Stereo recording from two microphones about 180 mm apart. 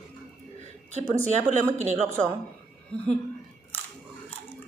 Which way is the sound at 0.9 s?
40° right (ahead or behind).